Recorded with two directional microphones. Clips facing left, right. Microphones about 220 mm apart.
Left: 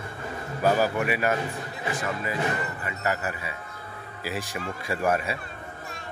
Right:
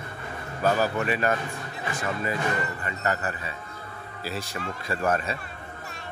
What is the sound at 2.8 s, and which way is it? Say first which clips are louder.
Speech: even; 10° left (ahead or behind).